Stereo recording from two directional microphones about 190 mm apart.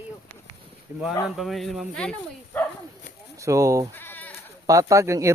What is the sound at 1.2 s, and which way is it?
Speech, centre (ahead or behind).